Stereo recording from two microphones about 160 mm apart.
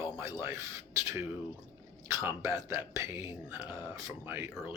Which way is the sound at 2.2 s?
20° right (ahead or behind).